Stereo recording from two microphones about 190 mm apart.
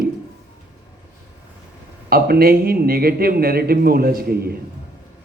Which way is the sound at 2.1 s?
50° right (ahead or behind).